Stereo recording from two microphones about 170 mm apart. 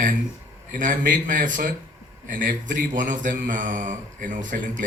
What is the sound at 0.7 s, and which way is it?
Speech, 55° right (ahead or behind).